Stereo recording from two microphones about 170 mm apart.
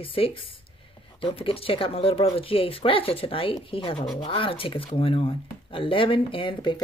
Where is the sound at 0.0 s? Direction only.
30° left (ahead or behind).